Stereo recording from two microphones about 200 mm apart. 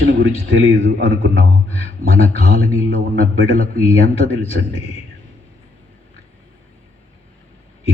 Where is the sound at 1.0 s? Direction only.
30° left (ahead or behind).